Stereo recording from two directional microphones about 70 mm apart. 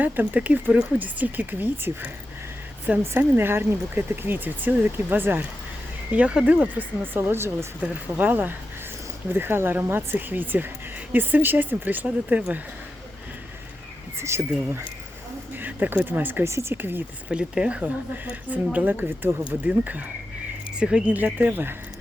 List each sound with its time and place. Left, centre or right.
0.0 s speech: right
6.1 s speech: centre; by 7.7 s right
7.8 s speech: right
12.0 s speech: centre
14.2 s speech: right
15.5 s a sound: right
16.0 s speech: right
16.4 s speech: right
17.2 s speech: centre
21.1 s speech: right